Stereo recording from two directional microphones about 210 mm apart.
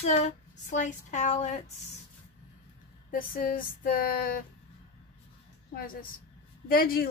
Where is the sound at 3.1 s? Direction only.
40° left (ahead or behind).